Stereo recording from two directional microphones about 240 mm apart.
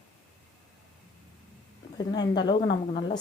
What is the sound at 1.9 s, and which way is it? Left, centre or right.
Speech, centre.